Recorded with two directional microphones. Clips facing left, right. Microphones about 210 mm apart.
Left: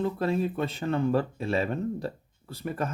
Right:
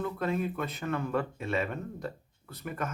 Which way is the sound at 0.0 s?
30° left (ahead or behind).